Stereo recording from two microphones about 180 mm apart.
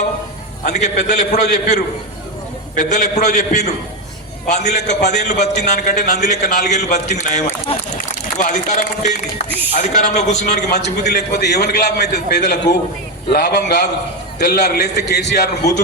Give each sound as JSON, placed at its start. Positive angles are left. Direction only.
{"t": 0.6, "sound": "a man's voice", "side_deg": 40}
{"t": 8.4, "sound": "a sound", "side_deg": 45}
{"t": 9.7, "sound": "a man's voice", "side_deg": 40}
{"t": 10.8, "sound": "a man's voice", "side_deg": 65}